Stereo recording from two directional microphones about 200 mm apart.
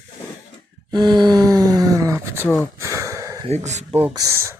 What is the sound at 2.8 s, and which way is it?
Wheeze, 15° right (ahead or behind).